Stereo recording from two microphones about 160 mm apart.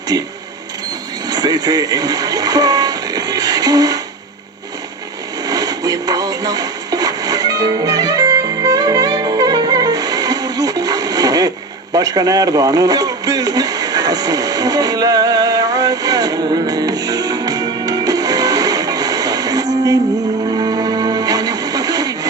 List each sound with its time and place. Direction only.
0.1 s speech: 25° right (ahead or behind)
1.3 s speech: 25° right (ahead or behind)
5.5 s synthetic singing: 25° right (ahead or behind)
20.5 s music: 25° right (ahead or behind)